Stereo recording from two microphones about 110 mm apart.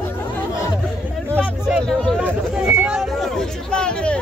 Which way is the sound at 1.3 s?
15° left (ahead or behind).